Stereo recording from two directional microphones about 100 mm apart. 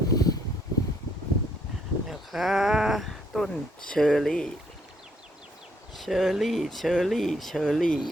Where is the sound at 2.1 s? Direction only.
Centre (ahead or behind).